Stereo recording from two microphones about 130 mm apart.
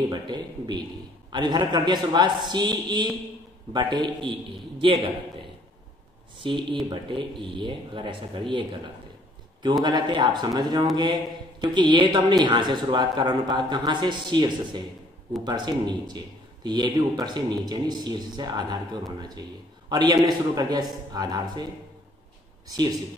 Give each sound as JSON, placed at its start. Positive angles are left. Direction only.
{"t": 0.1, "sound": "speech", "side_deg": -35}
{"t": 6.4, "sound": "speech", "side_deg": -40}
{"t": 22.7, "sound": "speech", "side_deg": -30}